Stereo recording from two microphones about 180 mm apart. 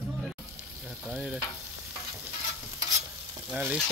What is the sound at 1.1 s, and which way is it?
Speech, 5° right (ahead or behind).